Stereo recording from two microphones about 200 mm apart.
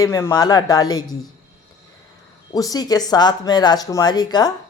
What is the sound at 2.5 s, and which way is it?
Speech, 20° left (ahead or behind).